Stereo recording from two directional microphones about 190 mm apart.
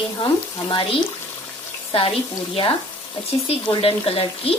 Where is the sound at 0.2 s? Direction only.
25° left (ahead or behind).